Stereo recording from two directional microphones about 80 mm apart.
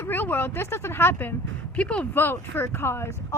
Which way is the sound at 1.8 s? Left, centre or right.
Centre.